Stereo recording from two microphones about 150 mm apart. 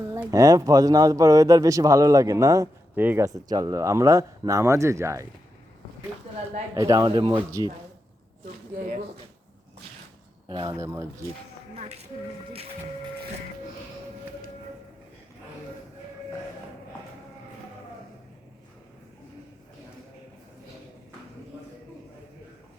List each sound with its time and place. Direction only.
0.1 s speech: 25° right (ahead or behind)
6.7 s speech: 25° right (ahead or behind)
8.7 s speech: 55° right (ahead or behind)
10.5 s speech: 25° right (ahead or behind)